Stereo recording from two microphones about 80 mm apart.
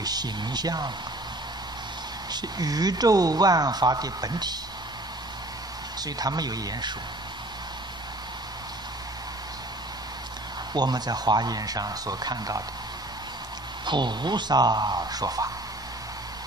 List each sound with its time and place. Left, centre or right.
0.0 s speech: right
2.3 s speech: right
5.9 s speech: right
10.7 s speech: right
13.8 s speech: right